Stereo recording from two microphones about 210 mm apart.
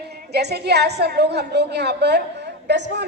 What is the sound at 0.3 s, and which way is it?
A woman's voice, 50° right (ahead or behind).